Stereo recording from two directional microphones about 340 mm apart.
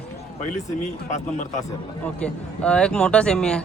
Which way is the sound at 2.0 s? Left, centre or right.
Centre.